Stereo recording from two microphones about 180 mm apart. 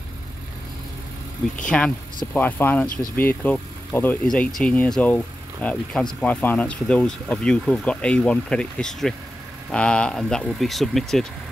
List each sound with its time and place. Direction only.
1.7 s speech: 5° left (ahead or behind)